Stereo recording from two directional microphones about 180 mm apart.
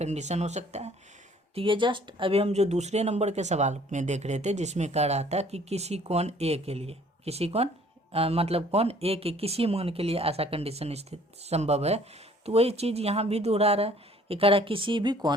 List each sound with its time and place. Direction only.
0.0 s speech: 40° right (ahead or behind)
1.5 s speech: 30° right (ahead or behind)